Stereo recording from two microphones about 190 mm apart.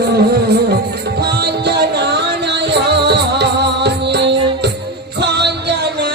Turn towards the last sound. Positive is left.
turn(degrees=-65)  # may be behind; listen again after turning